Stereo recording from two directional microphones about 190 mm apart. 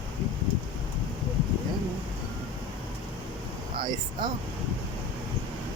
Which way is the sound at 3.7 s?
25° right (ahead or behind).